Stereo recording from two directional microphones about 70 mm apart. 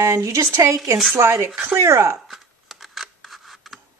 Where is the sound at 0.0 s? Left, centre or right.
Right.